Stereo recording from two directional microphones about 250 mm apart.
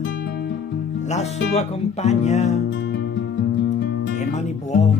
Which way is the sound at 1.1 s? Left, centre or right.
Left.